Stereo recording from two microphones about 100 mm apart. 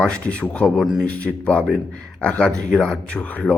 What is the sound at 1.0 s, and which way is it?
Speech, 10° left (ahead or behind).